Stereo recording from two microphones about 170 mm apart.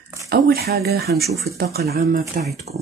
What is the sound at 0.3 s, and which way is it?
Speech, 70° right (ahead or behind).